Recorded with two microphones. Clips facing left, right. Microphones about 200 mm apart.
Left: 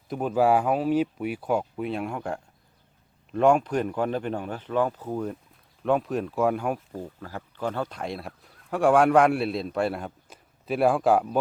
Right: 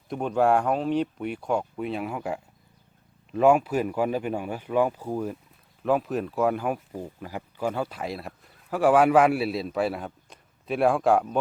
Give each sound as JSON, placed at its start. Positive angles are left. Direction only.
{"t": 0.1, "sound": "speech", "side_deg": 5}